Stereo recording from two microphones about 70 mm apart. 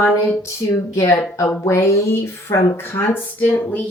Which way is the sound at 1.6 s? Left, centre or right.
Left.